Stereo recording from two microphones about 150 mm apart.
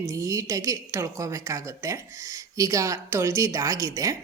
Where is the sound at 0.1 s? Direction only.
20° right (ahead or behind).